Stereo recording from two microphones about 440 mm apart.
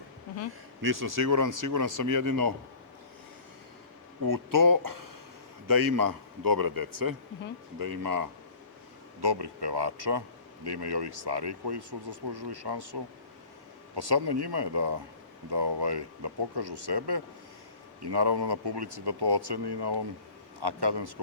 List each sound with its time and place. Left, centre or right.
0.8 s speech: right
4.2 s speech: right
9.2 s speech: right